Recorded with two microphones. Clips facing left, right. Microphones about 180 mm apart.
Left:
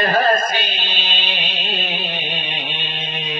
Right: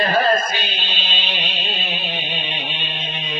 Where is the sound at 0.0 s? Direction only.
50° left (ahead or behind).